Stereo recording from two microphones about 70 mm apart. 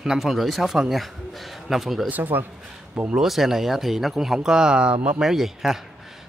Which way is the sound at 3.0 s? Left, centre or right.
Centre.